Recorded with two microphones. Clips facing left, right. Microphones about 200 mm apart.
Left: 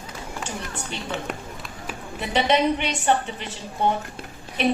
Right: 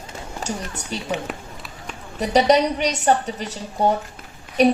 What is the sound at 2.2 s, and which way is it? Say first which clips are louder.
Speech: right 5 dB; 40° right (ahead or behind).